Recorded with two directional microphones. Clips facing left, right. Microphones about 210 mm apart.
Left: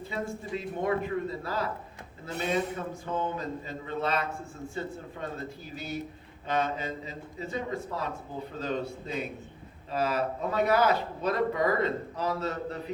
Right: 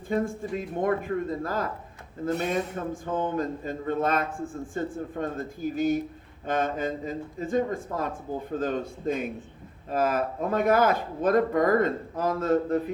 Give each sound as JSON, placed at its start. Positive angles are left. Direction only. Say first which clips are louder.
{"t": 0.1, "sound": "a man's voice", "louder": "right 7 dB", "side_deg": -50}